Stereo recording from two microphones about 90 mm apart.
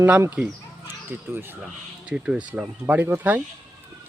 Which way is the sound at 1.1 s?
25° right (ahead or behind).